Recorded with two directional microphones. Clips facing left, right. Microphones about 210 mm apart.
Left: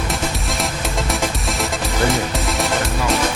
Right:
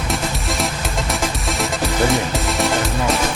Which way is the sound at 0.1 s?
Centre (ahead or behind).